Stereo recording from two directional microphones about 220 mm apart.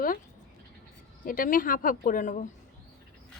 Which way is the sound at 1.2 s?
40° left (ahead or behind).